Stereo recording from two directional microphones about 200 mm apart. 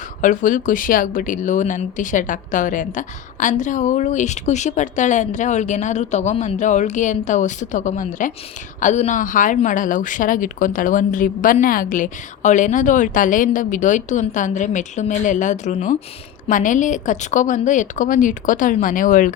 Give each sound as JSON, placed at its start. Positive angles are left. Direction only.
{"t": 0.2, "sound": "speech", "side_deg": 40}